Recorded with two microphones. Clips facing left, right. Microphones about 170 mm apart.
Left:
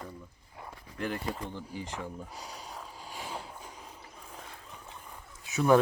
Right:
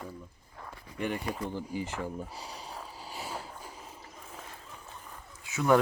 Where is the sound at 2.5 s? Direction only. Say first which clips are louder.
Right 1 dB; 35° right (ahead or behind).